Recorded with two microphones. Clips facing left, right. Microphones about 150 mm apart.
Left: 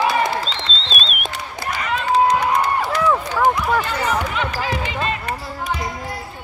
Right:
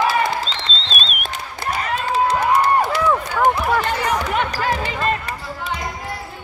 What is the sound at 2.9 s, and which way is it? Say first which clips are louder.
Run: even; centre (ahead or behind).